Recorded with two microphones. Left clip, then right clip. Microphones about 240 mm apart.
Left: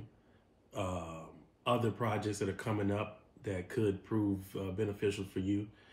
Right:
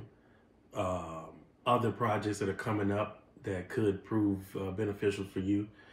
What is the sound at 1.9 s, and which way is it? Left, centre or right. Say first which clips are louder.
Speech: right 4 dB; centre.